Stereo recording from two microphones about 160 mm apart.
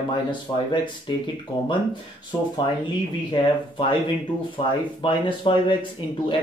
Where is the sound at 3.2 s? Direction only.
30° left (ahead or behind).